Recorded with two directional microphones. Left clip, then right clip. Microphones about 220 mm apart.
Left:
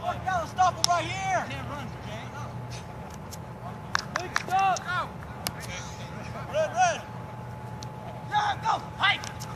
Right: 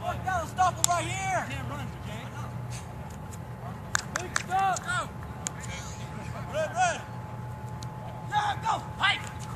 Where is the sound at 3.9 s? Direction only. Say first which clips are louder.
Left 2 dB; 55° right (ahead or behind).